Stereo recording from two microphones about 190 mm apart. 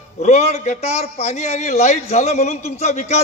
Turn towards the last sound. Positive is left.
turn(degrees=35)  # may be behind; listen again after turning